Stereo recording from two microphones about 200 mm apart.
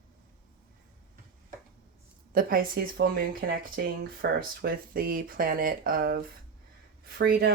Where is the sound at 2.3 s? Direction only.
45° right (ahead or behind).